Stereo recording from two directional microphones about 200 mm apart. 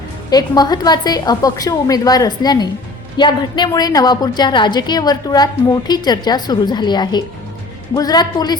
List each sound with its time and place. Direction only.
0.3 s a woman's voice: 20° left (ahead or behind)